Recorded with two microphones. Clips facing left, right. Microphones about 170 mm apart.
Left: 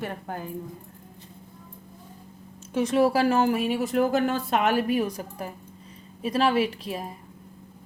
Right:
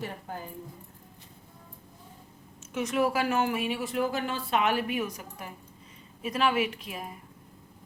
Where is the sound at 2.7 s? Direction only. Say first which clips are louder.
Left 6 dB; 30° left (ahead or behind).